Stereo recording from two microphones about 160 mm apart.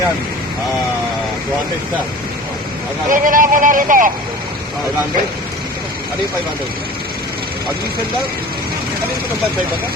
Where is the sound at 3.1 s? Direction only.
55° right (ahead or behind).